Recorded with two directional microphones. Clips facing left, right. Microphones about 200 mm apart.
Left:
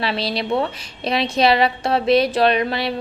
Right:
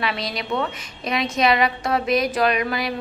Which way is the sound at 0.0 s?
30° left (ahead or behind).